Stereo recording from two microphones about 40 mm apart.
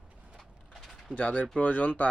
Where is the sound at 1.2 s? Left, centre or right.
Left.